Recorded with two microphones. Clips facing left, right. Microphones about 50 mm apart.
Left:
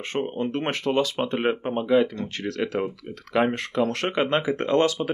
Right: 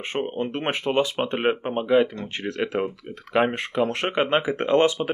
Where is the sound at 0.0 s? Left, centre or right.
Right.